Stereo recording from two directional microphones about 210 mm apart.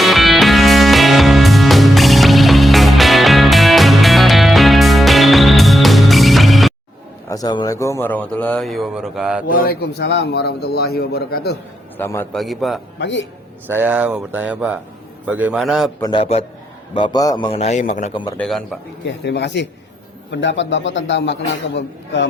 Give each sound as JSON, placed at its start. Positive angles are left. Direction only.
{"t": 0.0, "sound": "music", "side_deg": 0}
{"t": 7.3, "sound": "speech", "side_deg": 20}
{"t": 9.5, "sound": "a man's voice", "side_deg": 45}
{"t": 11.9, "sound": "speech", "side_deg": 10}
{"t": 12.4, "sound": "a man's voice", "side_deg": 0}
{"t": 13.0, "sound": "speech", "side_deg": 60}
{"t": 13.7, "sound": "a man's voice", "side_deg": -10}
{"t": 16.0, "sound": "a man's voice", "side_deg": 20}
{"t": 18.1, "sound": "a man's voice", "side_deg": 25}
{"t": 18.3, "sound": "a man's voice", "side_deg": 0}
{"t": 19.0, "sound": "speech", "side_deg": 55}